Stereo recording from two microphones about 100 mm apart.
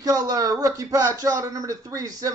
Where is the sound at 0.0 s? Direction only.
40° right (ahead or behind).